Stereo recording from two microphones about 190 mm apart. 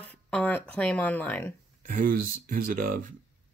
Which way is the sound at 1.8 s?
45° right (ahead or behind).